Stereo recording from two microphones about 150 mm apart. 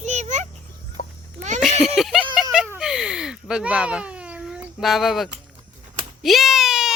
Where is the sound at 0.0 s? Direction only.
50° right (ahead or behind).